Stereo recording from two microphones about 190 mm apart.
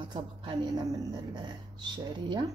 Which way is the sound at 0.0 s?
25° right (ahead or behind).